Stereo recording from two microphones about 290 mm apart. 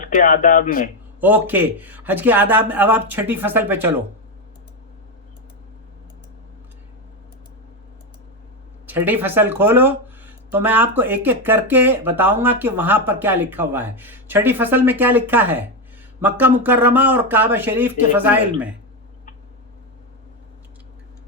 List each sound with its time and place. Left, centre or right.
0.0 s speech: left
1.2 s speech: centre
8.9 s speech: centre